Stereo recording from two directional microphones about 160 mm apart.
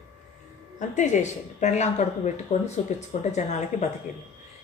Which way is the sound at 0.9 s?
50° left (ahead or behind).